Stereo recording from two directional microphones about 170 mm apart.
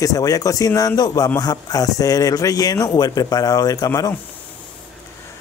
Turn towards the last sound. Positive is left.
turn(degrees=20)  # may be behind; listen again after turning